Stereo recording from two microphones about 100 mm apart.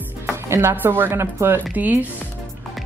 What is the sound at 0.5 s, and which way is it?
Speech, 25° right (ahead or behind).